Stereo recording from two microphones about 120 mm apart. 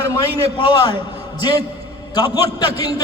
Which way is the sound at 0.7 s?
35° left (ahead or behind).